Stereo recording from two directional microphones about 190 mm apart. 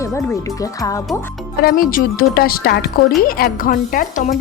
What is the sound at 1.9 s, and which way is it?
A woman's voice, 50° left (ahead or behind).